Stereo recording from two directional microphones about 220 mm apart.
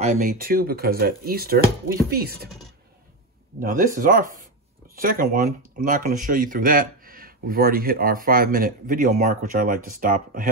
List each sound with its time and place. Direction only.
0.0 s speech: 35° right (ahead or behind)
3.5 s speech: 40° right (ahead or behind)